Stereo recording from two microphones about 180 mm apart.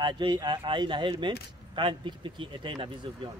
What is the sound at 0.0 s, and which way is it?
Speech, 25° right (ahead or behind).